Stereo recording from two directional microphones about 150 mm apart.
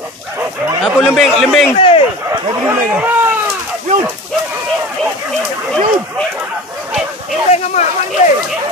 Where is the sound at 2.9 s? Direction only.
10° right (ahead or behind).